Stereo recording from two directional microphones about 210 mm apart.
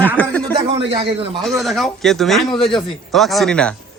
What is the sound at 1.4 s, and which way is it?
Speech, centre (ahead or behind).